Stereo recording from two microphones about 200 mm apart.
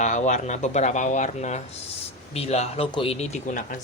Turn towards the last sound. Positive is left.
turn(degrees=40)  # may be behind; listen again after turning